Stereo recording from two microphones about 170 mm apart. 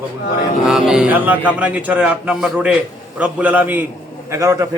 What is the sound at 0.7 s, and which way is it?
Speech, 5° right (ahead or behind).